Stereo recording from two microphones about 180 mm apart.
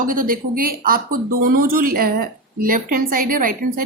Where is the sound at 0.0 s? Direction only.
50° right (ahead or behind).